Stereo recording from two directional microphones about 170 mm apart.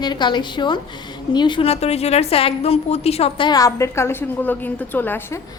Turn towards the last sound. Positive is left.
turn(degrees=10)  # may be behind; listen again after turning